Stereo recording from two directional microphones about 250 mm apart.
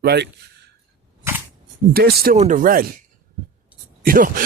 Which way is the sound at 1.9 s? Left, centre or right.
Right.